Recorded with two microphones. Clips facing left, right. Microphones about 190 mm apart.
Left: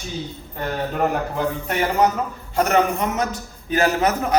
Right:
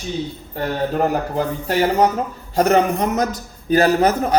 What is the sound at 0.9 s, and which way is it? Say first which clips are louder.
A man's voice: right 1 dB; 35° right (ahead or behind).